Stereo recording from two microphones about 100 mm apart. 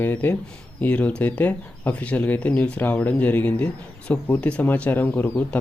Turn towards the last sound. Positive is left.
turn(degrees=20)  # may be behind; listen again after turning